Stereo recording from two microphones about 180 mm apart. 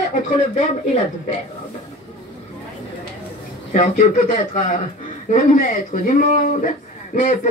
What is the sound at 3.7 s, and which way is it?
Speech, 45° left (ahead or behind).